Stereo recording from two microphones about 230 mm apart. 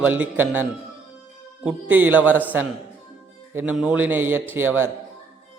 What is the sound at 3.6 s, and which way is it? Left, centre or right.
A man's voice, centre.